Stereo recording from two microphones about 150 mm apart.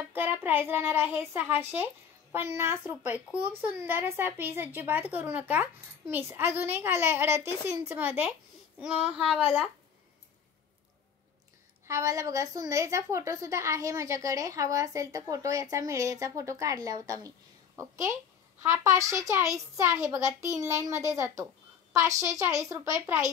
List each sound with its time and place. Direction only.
0.1 s a child's voice: 15° right (ahead or behind)
11.9 s a woman's voice: 20° right (ahead or behind)